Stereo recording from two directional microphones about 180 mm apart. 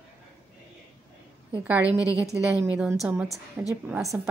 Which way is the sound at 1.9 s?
20° left (ahead or behind).